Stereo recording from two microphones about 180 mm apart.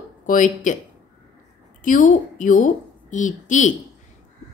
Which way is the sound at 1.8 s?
45° left (ahead or behind).